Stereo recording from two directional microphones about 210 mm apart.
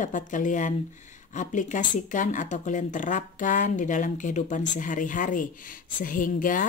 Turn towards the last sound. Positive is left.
turn(degrees=40)  # may be behind; listen again after turning